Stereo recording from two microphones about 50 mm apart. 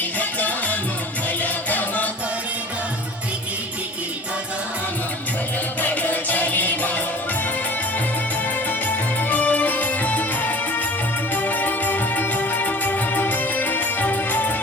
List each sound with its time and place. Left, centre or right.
0.2 s music: left
5.8 s music: left
8.9 s music: left